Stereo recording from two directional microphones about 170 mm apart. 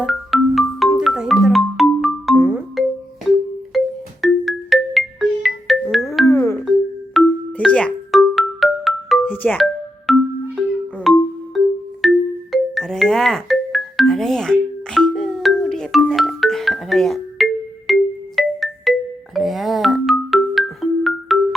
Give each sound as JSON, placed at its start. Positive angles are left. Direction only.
{"t": 0.0, "sound": "marimba", "side_deg": 0}
{"t": 3.3, "sound": "music", "side_deg": 0}
{"t": 4.2, "sound": "marimba", "side_deg": 0}
{"t": 6.2, "sound": "music", "side_deg": 20}
{"t": 6.7, "sound": "music", "side_deg": 0}